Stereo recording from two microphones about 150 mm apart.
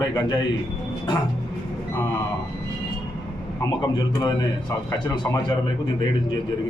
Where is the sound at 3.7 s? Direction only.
25° left (ahead or behind).